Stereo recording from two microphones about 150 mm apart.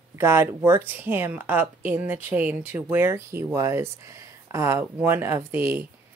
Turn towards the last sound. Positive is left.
turn(degrees=-15)  # may be behind; listen again after turning